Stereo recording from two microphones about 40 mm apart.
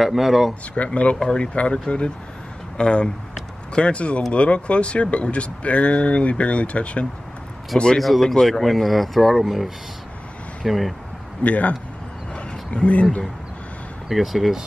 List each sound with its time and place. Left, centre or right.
0.0 s speech: centre
1.4 s speech: left
7.7 s speech: centre
8.0 s speech: centre
11.4 s speech: left
12.4 s wild animals: left
14.0 s speech: centre